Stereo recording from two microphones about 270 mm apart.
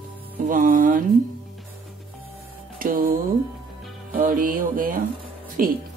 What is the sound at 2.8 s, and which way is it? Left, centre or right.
Speech, right.